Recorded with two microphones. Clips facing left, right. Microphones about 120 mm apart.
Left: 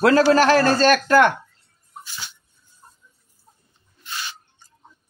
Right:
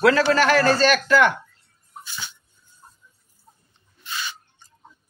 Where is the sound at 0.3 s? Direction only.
40° left (ahead or behind).